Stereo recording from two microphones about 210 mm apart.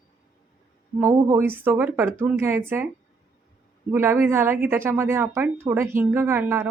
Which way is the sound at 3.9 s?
10° right (ahead or behind).